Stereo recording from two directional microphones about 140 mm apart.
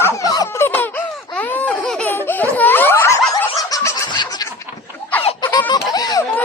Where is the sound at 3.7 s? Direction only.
25° left (ahead or behind).